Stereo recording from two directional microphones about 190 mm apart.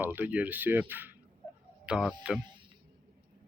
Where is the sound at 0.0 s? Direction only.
10° right (ahead or behind).